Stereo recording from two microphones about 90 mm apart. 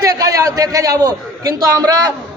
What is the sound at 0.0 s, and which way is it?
A man's voice, 45° right (ahead or behind).